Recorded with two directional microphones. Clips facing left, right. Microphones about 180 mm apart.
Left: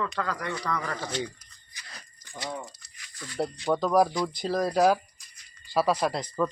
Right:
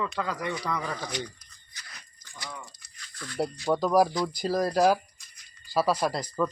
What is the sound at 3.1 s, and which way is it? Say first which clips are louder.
Speech: right 1 dB; 10° left (ahead or behind).